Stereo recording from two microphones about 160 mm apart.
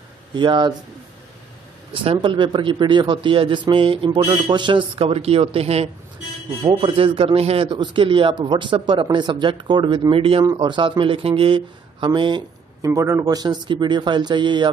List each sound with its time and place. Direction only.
0.4 s speech: 30° right (ahead or behind)
2.0 s speech: 30° right (ahead or behind)